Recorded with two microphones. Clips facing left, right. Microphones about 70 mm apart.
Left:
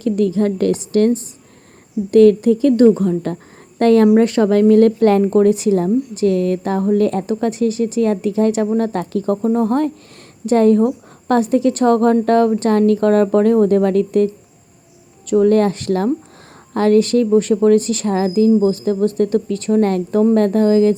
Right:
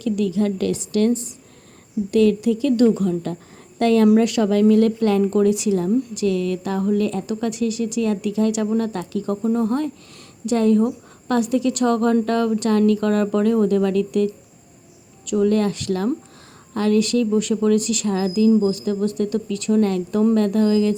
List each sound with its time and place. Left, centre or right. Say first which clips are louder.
0.0 s a woman's voice: left 4 dB; left
15.3 s a woman's voice: left 6 dB; left